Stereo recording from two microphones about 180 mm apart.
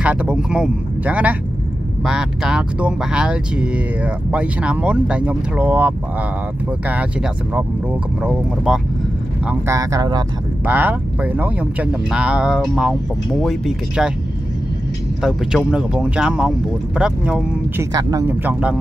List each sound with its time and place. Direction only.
0.0 s speech: 5° right (ahead or behind)
9.5 s speech: 15° right (ahead or behind)
10.6 s speech: 10° right (ahead or behind)
15.2 s speech: 5° right (ahead or behind)
17.9 s speech: 15° right (ahead or behind)